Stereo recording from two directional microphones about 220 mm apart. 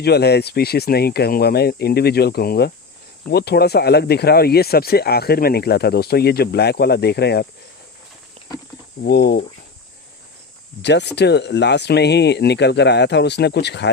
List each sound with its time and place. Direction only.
0.0 s speech: 50° left (ahead or behind)
8.4 s a sound: 25° right (ahead or behind)
9.0 s speech: 45° left (ahead or behind)
10.8 s speech: 50° left (ahead or behind)